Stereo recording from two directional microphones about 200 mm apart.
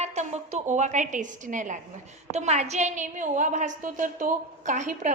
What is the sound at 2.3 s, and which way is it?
A woman's voice, 35° right (ahead or behind).